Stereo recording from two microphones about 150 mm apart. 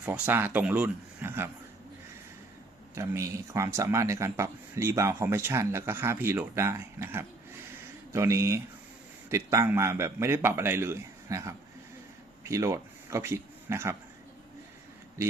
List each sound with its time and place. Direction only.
0.0 s a man's voice: 10° right (ahead or behind)
2.9 s speech: 20° right (ahead or behind)